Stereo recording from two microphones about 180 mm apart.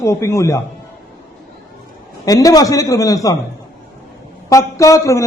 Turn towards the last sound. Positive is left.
turn(degrees=15)  # may be behind; listen again after turning